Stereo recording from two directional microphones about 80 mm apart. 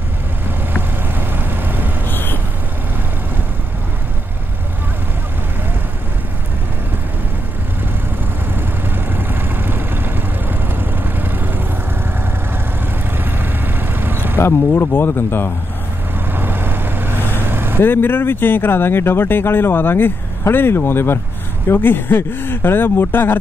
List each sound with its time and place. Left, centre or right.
0.7 s vehicle: right
2.0 s vehicle: left
8.5 s vehicle: right
13.2 s vehicle: right
14.4 s speech: left
16.3 s vehicle: right
17.7 s speech: left